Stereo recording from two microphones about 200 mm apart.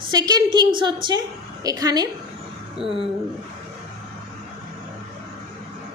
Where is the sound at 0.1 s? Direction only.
20° right (ahead or behind).